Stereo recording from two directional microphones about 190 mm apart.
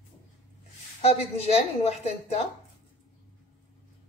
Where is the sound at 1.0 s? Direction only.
35° left (ahead or behind).